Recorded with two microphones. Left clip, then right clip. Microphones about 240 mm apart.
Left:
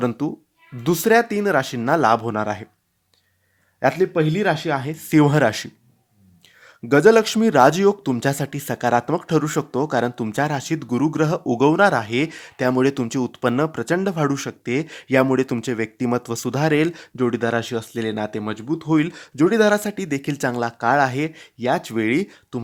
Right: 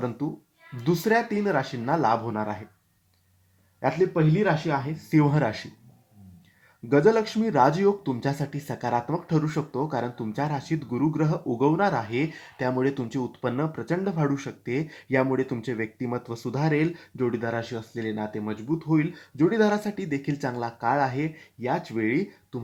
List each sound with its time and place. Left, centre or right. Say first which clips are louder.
0.9 s speech: left 7 dB; left
3.8 s speech: left 5 dB; left
6.8 s speech: left 7 dB; left